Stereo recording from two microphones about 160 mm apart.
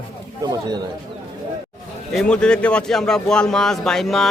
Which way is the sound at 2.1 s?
5° left (ahead or behind).